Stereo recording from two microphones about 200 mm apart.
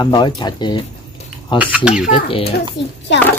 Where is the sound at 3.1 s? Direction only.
60° left (ahead or behind).